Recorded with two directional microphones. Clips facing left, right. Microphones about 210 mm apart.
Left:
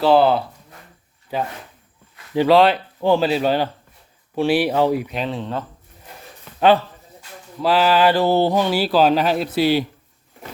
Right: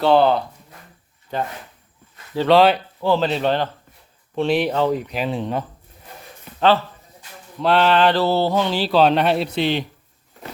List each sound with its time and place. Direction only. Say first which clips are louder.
0.0 s speech: left 1 dB; 5° left (ahead or behind)
2.5 s speech: even; centre (ahead or behind)
3.0 s speech: left 3 dB; 10° left (ahead or behind)
5.1 s speech: right 2 dB; 10° right (ahead or behind)
7.6 s speech: even; 5° left (ahead or behind)